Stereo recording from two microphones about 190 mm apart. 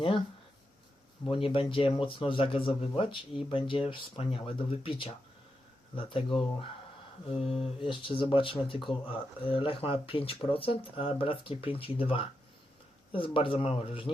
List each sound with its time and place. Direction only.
1.2 s speech: 25° left (ahead or behind)